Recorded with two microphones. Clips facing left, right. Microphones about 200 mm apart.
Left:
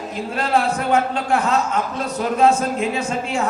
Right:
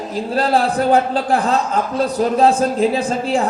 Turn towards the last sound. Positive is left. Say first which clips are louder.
# right 4 dB
turn(degrees=-35)  # may be behind; listen again after turning